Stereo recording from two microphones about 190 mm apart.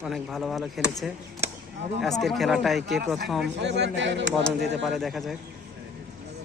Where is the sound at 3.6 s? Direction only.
65° right (ahead or behind).